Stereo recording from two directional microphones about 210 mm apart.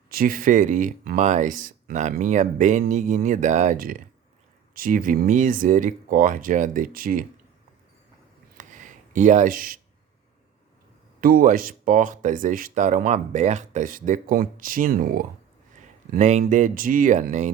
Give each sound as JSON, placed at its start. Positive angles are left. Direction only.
{"t": 0.1, "sound": "speech", "side_deg": -40}
{"t": 8.5, "sound": "a sound", "side_deg": -35}
{"t": 11.2, "sound": "speech", "side_deg": -40}